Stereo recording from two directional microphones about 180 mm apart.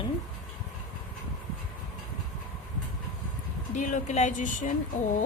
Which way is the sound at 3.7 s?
45° left (ahead or behind).